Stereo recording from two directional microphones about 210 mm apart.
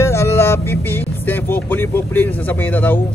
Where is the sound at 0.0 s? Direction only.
10° left (ahead or behind).